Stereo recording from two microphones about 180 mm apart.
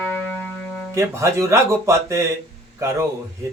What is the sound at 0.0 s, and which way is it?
Music, 10° left (ahead or behind).